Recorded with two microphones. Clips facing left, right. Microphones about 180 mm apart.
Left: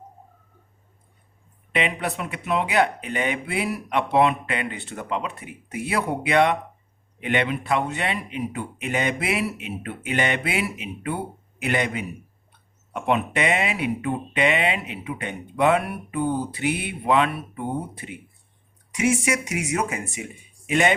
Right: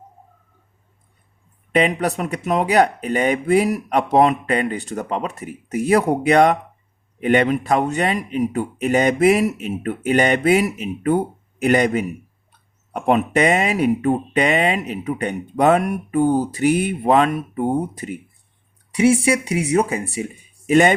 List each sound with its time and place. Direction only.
1.7 s speech: 40° right (ahead or behind)
18.9 s speech: 30° right (ahead or behind)